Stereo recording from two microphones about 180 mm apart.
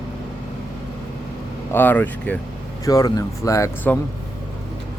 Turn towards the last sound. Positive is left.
turn(degrees=15)  # may be behind; listen again after turning